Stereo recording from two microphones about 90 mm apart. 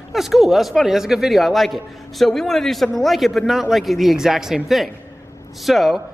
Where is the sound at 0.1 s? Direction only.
Centre (ahead or behind).